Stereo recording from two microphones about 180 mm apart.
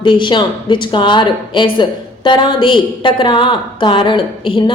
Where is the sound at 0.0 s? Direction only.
25° left (ahead or behind).